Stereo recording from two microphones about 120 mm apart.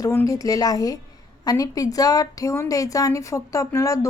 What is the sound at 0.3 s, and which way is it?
A woman's voice, 30° left (ahead or behind).